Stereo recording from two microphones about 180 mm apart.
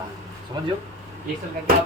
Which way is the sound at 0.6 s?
25° right (ahead or behind).